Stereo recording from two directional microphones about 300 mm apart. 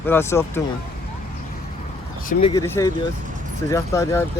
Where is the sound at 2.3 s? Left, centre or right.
Centre.